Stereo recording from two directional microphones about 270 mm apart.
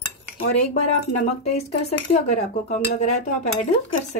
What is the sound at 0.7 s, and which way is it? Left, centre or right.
Speech, left.